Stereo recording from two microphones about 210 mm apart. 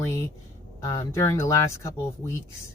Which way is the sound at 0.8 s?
15° left (ahead or behind).